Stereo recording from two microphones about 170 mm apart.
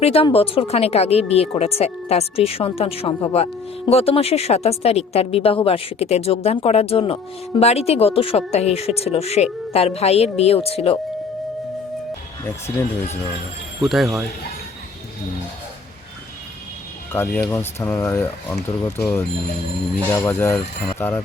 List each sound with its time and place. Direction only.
0.0 s a woman's voice: 35° left (ahead or behind)
3.3 s a woman's voice: 35° left (ahead or behind)
13.8 s speech: centre (ahead or behind)
17.1 s speech: 10° left (ahead or behind)